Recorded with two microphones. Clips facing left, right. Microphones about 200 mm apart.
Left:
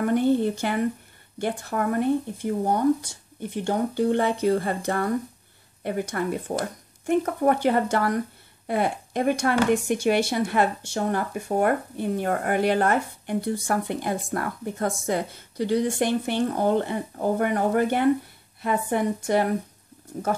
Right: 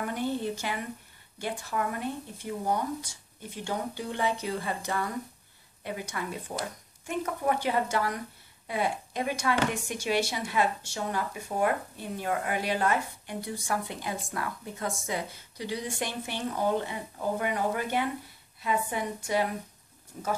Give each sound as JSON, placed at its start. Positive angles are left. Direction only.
{"t": 0.0, "sound": "speech", "side_deg": 55}